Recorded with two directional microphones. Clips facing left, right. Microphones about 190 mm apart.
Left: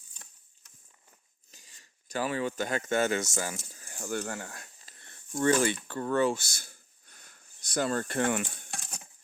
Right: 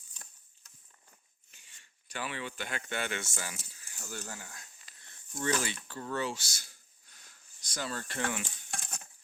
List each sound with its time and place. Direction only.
1.5 s speech: 40° left (ahead or behind); by 4.7 s 65° left (ahead or behind)
5.0 s speech: 50° left (ahead or behind)